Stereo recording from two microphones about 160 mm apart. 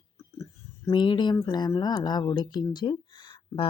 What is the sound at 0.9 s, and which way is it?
Speech, 30° left (ahead or behind).